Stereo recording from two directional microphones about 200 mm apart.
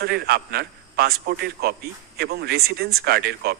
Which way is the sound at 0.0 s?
50° right (ahead or behind).